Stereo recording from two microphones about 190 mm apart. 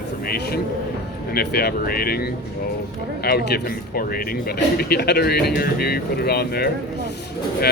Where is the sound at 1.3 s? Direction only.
55° left (ahead or behind).